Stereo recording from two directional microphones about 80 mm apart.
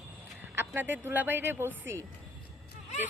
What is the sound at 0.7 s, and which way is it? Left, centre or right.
Speech, right.